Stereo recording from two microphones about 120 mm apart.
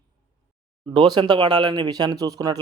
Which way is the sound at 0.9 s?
45° right (ahead or behind).